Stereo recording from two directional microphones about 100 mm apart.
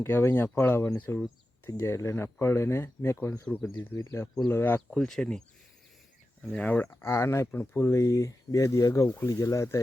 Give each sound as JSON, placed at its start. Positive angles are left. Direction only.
{"t": 0.0, "sound": "speech", "side_deg": 25}
{"t": 4.9, "sound": "speech", "side_deg": 5}
{"t": 6.5, "sound": "speech", "side_deg": 15}
{"t": 9.0, "sound": "speech", "side_deg": 20}
{"t": 9.3, "sound": "speech", "side_deg": 35}